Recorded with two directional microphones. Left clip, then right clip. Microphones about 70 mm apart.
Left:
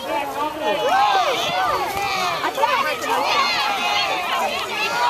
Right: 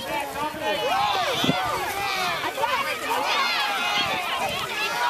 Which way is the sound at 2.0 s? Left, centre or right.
Centre.